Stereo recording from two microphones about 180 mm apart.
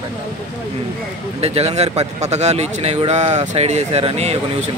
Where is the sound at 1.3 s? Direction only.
35° right (ahead or behind).